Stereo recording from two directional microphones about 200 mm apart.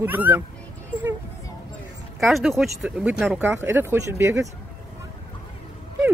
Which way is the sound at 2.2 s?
Centre (ahead or behind).